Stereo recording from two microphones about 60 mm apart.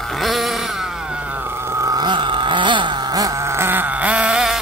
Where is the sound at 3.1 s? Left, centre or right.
Right.